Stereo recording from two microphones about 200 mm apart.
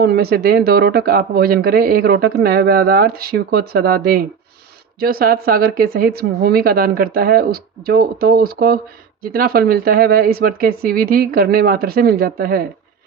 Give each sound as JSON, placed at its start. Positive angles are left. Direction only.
{"t": 0.1, "sound": "speech", "side_deg": -50}